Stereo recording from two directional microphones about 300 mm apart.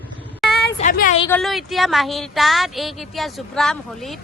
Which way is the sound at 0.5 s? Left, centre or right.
Left.